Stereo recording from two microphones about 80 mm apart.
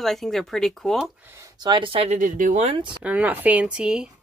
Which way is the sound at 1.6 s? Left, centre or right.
Right.